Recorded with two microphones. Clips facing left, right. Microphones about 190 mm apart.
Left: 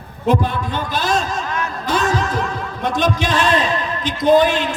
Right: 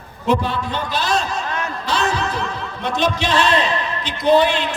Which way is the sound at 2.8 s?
50° left (ahead or behind).